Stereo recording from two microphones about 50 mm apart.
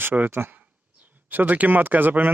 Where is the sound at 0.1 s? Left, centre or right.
Right.